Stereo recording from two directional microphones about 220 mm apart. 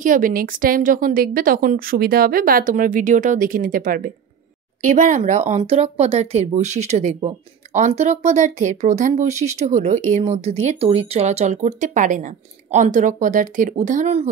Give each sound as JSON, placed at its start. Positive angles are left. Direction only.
{"t": 0.0, "sound": "speech", "side_deg": -35}